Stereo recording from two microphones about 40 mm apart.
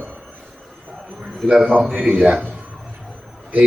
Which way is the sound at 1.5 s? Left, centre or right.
Centre.